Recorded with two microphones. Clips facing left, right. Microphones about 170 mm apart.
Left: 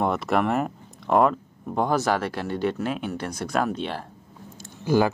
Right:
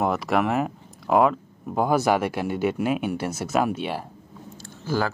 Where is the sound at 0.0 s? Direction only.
Centre (ahead or behind).